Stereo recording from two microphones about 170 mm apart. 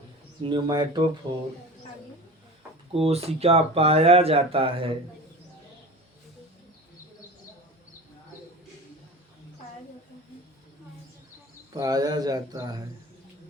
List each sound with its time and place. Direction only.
0.4 s speech: 25° right (ahead or behind)
2.9 s speech: 35° right (ahead or behind)
11.7 s speech: 20° right (ahead or behind)